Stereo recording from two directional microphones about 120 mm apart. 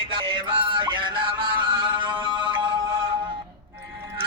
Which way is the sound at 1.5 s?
40° right (ahead or behind).